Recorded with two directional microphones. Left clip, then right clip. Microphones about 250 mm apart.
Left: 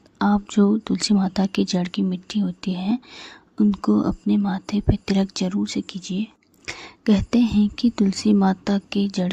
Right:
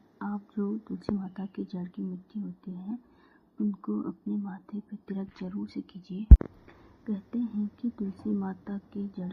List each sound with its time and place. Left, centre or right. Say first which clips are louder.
0.2 s speech: left 16 dB; left
7.0 s speech: left 15 dB; left